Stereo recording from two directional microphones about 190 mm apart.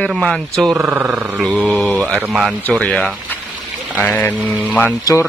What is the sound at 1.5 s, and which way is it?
Mantra, centre (ahead or behind).